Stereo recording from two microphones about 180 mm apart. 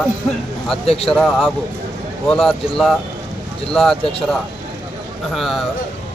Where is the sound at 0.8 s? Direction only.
35° left (ahead or behind).